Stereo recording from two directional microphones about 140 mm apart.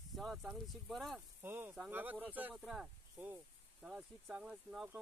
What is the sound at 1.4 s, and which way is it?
Speech, 15° right (ahead or behind).